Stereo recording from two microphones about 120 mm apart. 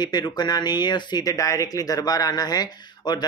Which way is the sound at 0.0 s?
35° left (ahead or behind).